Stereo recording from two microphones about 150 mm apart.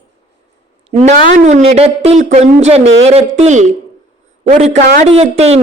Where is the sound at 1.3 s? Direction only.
50° right (ahead or behind).